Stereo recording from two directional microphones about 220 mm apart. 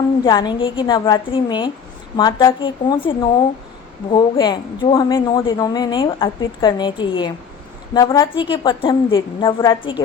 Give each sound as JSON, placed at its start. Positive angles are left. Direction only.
{"t": 0.3, "sound": "a woman's voice", "side_deg": 20}